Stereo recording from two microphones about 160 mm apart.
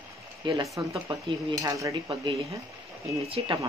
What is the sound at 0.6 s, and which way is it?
Cutlery, 20° right (ahead or behind).